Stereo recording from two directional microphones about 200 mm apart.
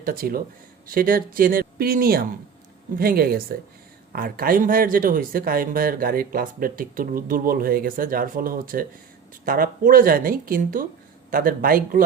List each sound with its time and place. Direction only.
0.0 s speech: 45° right (ahead or behind)